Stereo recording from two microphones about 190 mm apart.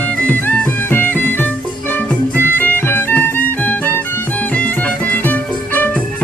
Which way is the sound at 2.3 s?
10° left (ahead or behind).